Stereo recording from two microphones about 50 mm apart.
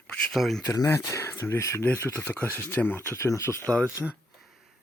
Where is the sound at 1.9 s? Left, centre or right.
Left.